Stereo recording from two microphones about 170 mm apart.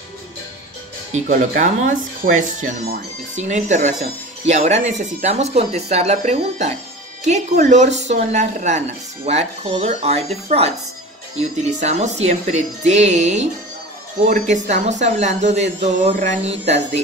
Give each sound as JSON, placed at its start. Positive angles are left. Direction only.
{"t": 1.1, "sound": "a woman's voice", "side_deg": -50}